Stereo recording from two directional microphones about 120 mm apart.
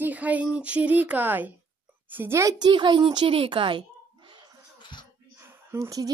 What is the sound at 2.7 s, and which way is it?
Speech, 40° right (ahead or behind).